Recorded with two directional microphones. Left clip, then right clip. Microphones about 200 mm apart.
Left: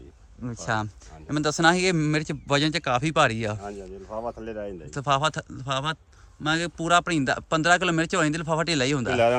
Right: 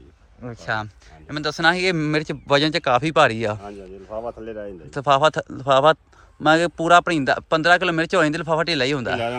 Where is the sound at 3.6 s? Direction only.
30° right (ahead or behind).